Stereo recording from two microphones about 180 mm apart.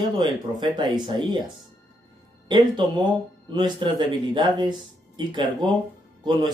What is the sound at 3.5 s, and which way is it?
Speech, 25° right (ahead or behind).